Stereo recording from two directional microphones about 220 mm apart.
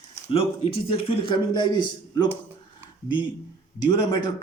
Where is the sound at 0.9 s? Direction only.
25° left (ahead or behind).